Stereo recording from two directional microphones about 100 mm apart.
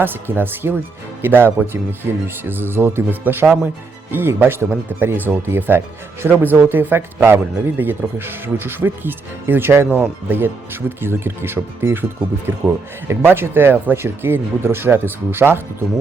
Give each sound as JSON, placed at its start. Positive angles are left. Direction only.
{"t": 0.0, "sound": "speech", "side_deg": -20}